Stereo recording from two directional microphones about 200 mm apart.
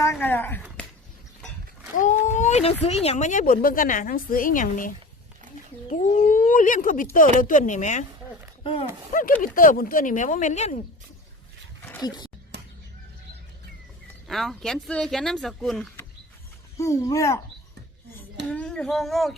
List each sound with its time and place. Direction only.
0.0 s speech: 10° left (ahead or behind)
2.0 s a sound: 40° left (ahead or behind)
2.8 s a woman's voice: 30° left (ahead or behind)
5.9 s a woman's voice: 35° left (ahead or behind)
9.4 s a woman's voice: 45° left (ahead or behind)
11.8 s dog: 10° left (ahead or behind)
12.5 s a sound: 55° right (ahead or behind)
14.3 s speech: centre (ahead or behind)
16.7 s speech: 15° left (ahead or behind)
18.5 s speech: 5° left (ahead or behind)